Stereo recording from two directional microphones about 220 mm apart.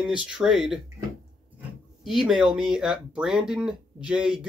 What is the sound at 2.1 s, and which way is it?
Speech, centre (ahead or behind).